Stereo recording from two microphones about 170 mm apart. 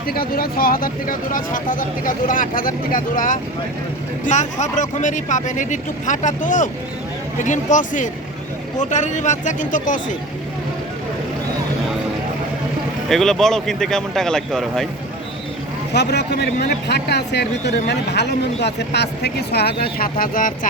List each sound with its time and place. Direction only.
0.1 s speech: 60° left (ahead or behind)
13.1 s speech: centre (ahead or behind)
15.9 s speech: 80° left; by 20.7 s 55° left (ahead or behind)